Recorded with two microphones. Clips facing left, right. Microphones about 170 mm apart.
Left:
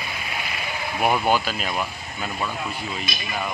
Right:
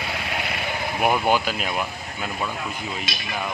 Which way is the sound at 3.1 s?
90° right.